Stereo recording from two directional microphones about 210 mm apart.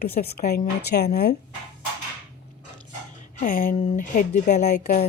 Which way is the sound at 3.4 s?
40° left (ahead or behind).